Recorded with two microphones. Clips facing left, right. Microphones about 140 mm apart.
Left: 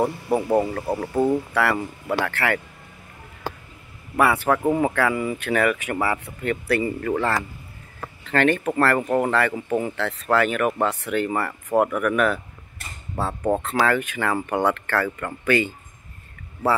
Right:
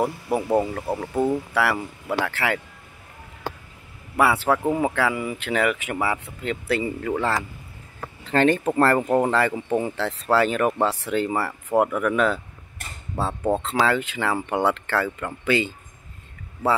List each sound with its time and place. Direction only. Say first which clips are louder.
0.0 s speech: left 2 dB; 5° right (ahead or behind)
4.2 s speech: left 1 dB; 10° right (ahead or behind)
5.9 s speech: left 1 dB; 5° right (ahead or behind)
6.4 s speech: left 2 dB; 20° right (ahead or behind)
8.3 s speech: right 1 dB; 25° right (ahead or behind)
10.7 s speech: even; 5° right (ahead or behind)
11.0 s speech: even; 25° right (ahead or behind)
13.1 s speech: even; centre (ahead or behind)
13.7 s speech: even; 15° right (ahead or behind)